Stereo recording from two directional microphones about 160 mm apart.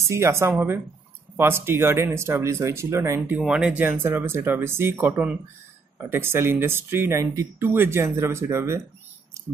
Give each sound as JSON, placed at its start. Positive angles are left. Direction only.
{"t": 0.0, "sound": "speech", "side_deg": -15}
{"t": 3.3, "sound": "speech", "side_deg": -5}